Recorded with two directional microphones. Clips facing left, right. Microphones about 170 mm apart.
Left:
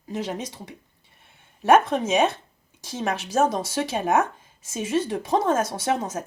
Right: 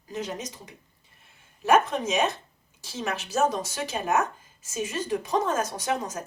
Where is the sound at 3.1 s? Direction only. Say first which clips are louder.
Left 3 dB; 30° left (ahead or behind).